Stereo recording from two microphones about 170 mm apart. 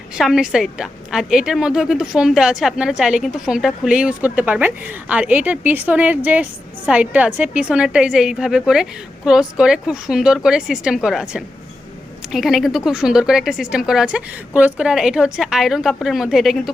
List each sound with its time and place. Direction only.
0.1 s a woman's voice: 5° right (ahead or behind)